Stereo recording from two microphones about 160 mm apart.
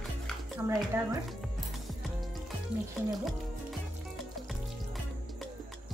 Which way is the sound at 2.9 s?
Centre (ahead or behind).